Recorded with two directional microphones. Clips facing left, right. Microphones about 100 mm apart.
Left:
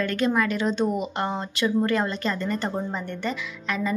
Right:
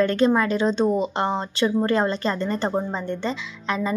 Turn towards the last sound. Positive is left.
turn(degrees=-25)  # may be behind; listen again after turning